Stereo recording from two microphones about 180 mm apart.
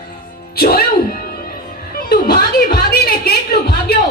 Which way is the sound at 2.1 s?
60° left (ahead or behind).